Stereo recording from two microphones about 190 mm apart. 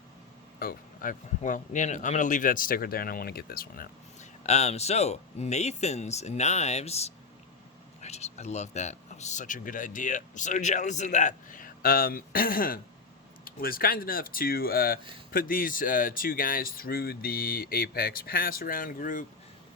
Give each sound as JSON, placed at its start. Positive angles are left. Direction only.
{"t": 0.6, "sound": "speech", "side_deg": 50}